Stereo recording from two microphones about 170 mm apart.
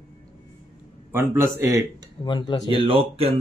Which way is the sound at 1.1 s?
15° right (ahead or behind).